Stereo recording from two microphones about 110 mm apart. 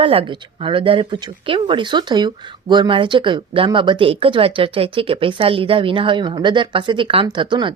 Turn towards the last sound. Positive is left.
turn(degrees=-45)  # may be behind; listen again after turning